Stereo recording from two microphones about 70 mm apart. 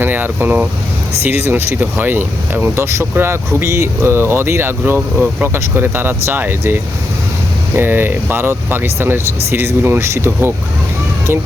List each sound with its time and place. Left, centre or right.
0.0 s speech: right
4.9 s speech: right
5.5 s speech: right